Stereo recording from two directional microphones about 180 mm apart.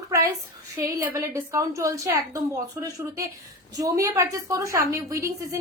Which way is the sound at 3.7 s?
20° right (ahead or behind).